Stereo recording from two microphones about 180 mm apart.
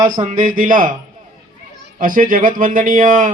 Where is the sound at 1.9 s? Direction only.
50° right (ahead or behind).